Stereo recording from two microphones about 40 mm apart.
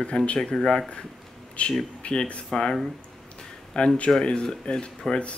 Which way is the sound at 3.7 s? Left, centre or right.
Left.